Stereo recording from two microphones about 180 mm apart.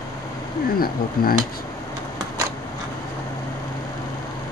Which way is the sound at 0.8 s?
55° left (ahead or behind).